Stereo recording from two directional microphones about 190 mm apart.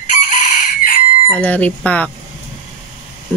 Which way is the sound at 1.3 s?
5° left (ahead or behind).